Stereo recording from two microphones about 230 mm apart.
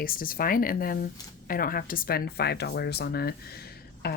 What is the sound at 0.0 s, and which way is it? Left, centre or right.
A woman's voice, left.